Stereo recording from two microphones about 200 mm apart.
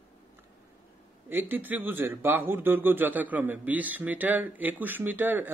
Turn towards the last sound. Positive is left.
turn(degrees=-10)  # may be behind; listen again after turning